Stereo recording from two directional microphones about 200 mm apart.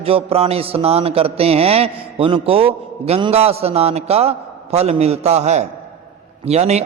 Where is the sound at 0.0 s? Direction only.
30° right (ahead or behind).